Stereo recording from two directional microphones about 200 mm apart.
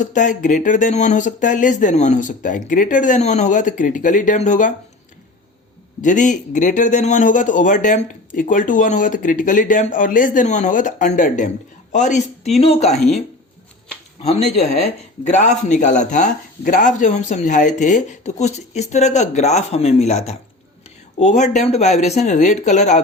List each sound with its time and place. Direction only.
0.0 s speech: 40° left (ahead or behind)
6.0 s speech: 40° left (ahead or behind)
14.2 s speech: 30° left (ahead or behind)